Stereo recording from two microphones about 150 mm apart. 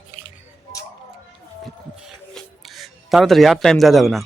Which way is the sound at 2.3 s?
Centre (ahead or behind).